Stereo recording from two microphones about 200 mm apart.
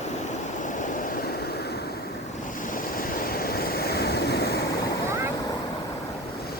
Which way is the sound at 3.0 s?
45° left (ahead or behind).